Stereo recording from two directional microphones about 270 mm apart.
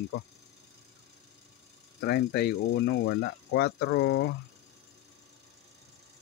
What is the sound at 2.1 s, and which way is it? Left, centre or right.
Speech, left.